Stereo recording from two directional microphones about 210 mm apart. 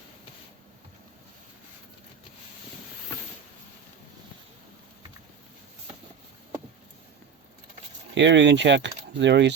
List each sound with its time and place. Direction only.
8.1 s speech: 55° right (ahead or behind)